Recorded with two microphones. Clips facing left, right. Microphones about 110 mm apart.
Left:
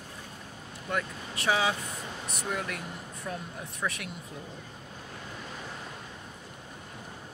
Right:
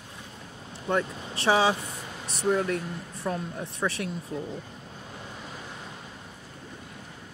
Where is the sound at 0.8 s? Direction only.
30° right (ahead or behind).